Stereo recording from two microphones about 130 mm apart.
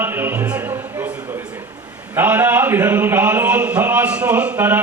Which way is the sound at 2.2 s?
15° right (ahead or behind).